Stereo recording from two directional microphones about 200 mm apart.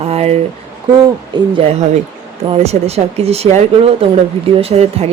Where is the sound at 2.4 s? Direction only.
30° right (ahead or behind).